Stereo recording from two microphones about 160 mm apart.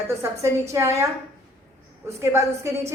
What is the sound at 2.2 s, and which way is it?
Speech, 15° right (ahead or behind).